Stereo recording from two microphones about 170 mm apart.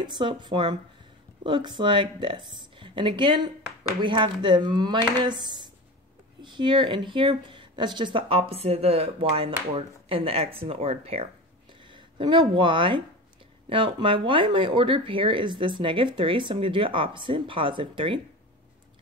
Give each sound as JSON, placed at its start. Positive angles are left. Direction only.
{"t": 0.0, "sound": "speech", "side_deg": -25}